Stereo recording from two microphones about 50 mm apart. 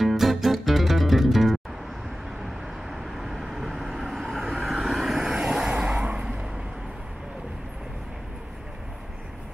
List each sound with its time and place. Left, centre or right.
0.0 s music: centre
2.9 s vehicle: centre; by 6.2 s right